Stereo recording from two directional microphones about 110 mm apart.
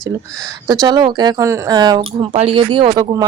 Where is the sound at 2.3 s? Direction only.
60° right (ahead or behind); by 3.2 s 40° right (ahead or behind).